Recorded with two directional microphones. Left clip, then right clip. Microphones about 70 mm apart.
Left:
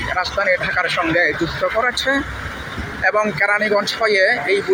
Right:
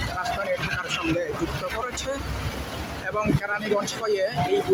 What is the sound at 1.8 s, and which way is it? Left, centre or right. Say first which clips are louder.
A man's voice: left 12 dB; left.